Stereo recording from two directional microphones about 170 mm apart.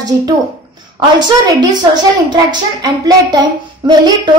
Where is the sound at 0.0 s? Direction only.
20° right (ahead or behind).